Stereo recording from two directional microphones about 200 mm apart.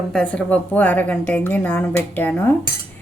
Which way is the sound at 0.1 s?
5° left (ahead or behind).